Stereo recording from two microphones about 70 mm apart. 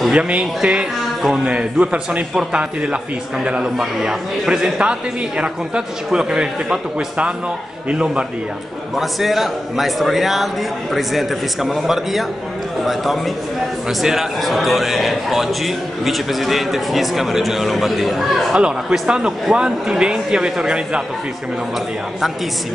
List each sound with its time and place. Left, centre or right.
0.1 s a man's voice: centre
3.7 s a man's voice: centre
8.9 s a man's voice: centre
18.6 s a man's voice: centre